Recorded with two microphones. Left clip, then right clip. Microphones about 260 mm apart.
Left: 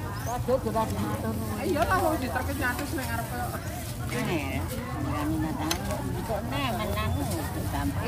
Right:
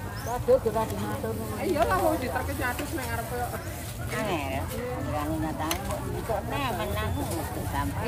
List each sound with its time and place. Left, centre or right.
0.3 s speech: right
6.5 s speech: centre